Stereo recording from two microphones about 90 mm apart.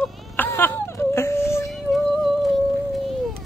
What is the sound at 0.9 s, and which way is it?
Whimper, 30° left (ahead or behind).